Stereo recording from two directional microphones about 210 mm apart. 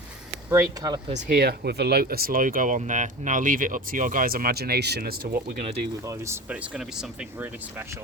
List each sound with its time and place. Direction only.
0.5 s speech: 15° right (ahead or behind)
1.1 s speech: 45° right (ahead or behind)
6.1 s speech: 10° right (ahead or behind)